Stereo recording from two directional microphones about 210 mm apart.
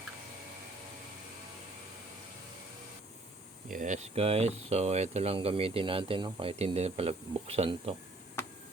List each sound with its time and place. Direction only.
3.7 s speech: 40° right (ahead or behind)